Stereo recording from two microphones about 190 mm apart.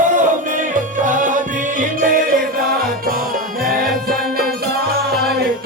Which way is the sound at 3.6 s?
50° right (ahead or behind).